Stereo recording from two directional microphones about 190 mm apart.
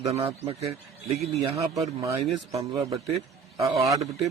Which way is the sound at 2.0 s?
15° right (ahead or behind).